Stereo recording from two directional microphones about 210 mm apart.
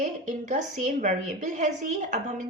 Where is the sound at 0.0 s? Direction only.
35° right (ahead or behind).